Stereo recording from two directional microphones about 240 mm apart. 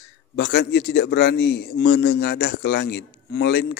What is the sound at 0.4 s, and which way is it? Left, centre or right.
A man's voice, left.